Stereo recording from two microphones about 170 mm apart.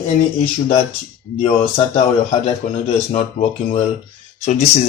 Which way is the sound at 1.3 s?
40° left (ahead or behind).